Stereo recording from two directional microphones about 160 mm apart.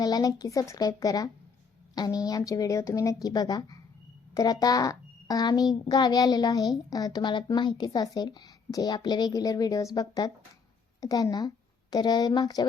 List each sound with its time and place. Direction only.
0.0 s a child's voice: 25° left (ahead or behind)